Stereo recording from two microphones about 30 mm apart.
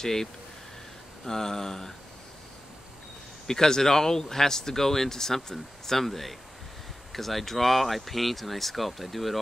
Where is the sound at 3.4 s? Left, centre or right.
Centre.